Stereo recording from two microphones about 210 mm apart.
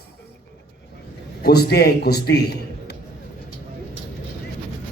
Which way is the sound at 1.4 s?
50° left (ahead or behind).